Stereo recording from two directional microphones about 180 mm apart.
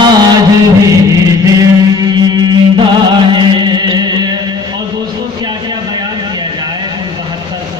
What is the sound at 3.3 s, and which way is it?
Music, 25° right (ahead or behind).